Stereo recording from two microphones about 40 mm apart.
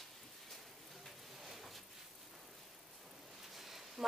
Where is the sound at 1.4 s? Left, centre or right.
Centre.